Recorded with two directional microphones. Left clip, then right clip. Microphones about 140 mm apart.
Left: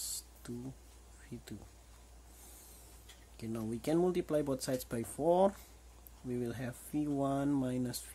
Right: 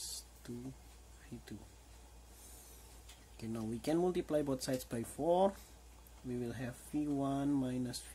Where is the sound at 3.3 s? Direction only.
25° left (ahead or behind).